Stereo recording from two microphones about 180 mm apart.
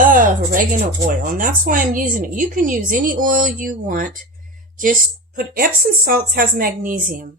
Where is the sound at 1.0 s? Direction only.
50° right (ahead or behind).